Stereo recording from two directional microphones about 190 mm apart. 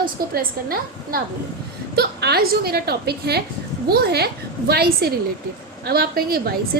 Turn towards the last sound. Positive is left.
turn(degrees=-55)  # may be behind; listen again after turning